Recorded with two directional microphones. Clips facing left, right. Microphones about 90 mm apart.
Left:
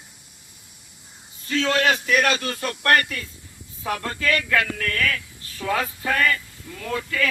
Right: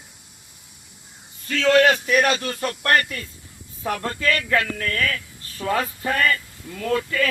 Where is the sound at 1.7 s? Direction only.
50° right (ahead or behind).